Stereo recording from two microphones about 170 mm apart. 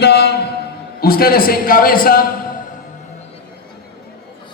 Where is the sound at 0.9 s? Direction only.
60° left (ahead or behind).